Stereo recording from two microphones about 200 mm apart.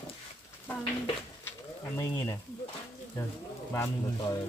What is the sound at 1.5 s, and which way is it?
Bird, 15° left (ahead or behind).